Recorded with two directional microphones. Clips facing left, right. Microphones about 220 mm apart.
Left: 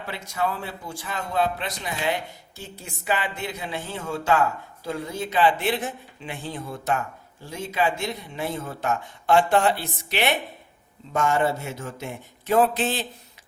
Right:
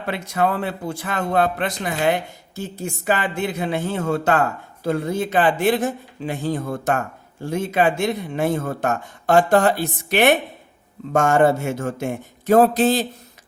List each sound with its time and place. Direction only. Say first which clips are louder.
0.0 s speech: right 6 dB; 65° right (ahead or behind); by 13.1 s 40° right (ahead or behind)